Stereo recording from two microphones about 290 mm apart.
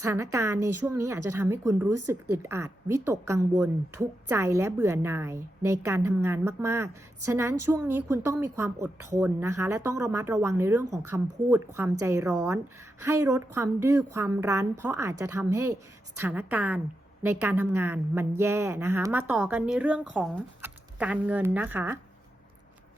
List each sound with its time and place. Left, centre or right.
0.0 s a woman's voice: centre
1.9 s speech: right
2.4 s a woman's voice: centre